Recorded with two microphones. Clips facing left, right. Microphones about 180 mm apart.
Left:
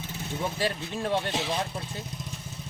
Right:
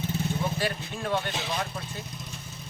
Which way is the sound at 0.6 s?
30° left (ahead or behind).